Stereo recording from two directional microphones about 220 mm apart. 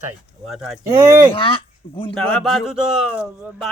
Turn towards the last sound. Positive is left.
turn(degrees=-5)  # may be behind; listen again after turning